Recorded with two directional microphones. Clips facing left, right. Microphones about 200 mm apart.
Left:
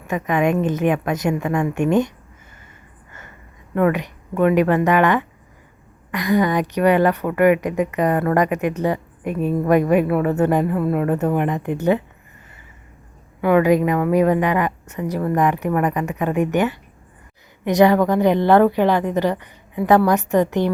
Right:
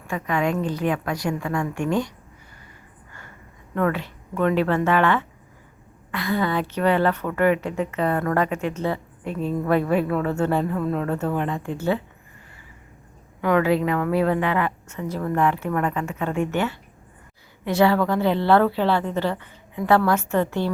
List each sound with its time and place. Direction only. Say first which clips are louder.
0.1 s a woman's voice: left 5 dB; 20° left (ahead or behind)
3.1 s a sound: left 3 dB; 20° left (ahead or behind)
3.8 s a woman's voice: left 5 dB; 15° left (ahead or behind)
13.4 s a woman's voice: left 5 dB; 15° left (ahead or behind)